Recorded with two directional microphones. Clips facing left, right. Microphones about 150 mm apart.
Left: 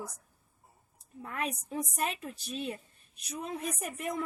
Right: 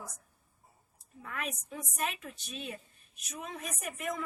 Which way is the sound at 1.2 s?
35° left (ahead or behind).